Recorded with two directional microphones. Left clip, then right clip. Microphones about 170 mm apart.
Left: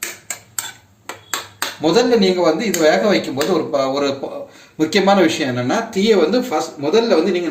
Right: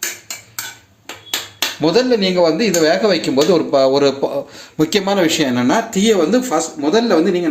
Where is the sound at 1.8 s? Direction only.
50° right (ahead or behind).